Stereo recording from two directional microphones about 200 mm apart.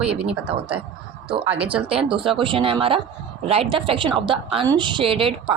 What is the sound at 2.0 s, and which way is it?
A woman's voice, 25° right (ahead or behind).